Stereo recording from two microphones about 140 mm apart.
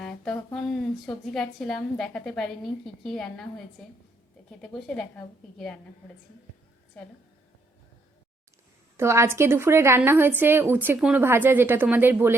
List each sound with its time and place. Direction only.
0.0 s a woman's voice: 5° left (ahead or behind)
4.4 s a woman's voice: 5° left (ahead or behind)
9.0 s a woman's voice: 20° right (ahead or behind)